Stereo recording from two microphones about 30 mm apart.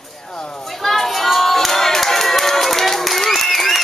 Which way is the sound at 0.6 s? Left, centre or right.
Centre.